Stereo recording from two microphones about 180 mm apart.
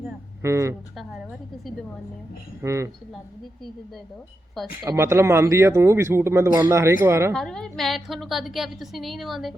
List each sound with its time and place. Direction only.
0.4 s speech: 15° right (ahead or behind)
2.6 s speech: 15° right (ahead or behind)
4.6 s a woman's voice: centre (ahead or behind)
4.9 s speech: 15° right (ahead or behind)
7.3 s a woman's voice: 5° left (ahead or behind)